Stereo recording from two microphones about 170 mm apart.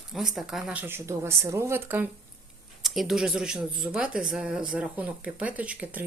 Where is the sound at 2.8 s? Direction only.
Centre (ahead or behind).